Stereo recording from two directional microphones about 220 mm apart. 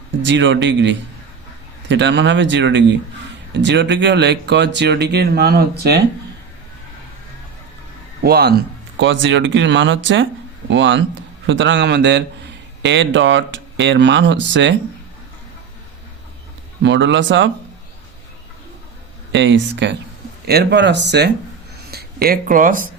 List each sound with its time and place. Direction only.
0.3 s speech: 55° right (ahead or behind)
8.2 s speech: 45° right (ahead or behind)
16.8 s speech: 55° right (ahead or behind)
19.3 s speech: 55° right (ahead or behind); by 22.9 s 40° right (ahead or behind)